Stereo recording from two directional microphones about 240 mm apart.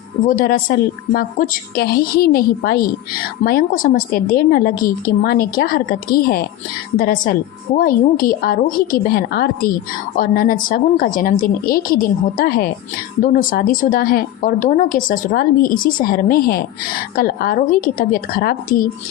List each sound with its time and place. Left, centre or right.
0.3 s a woman's voice: left